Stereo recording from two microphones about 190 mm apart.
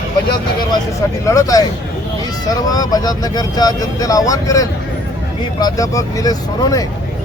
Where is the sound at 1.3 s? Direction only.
20° left (ahead or behind).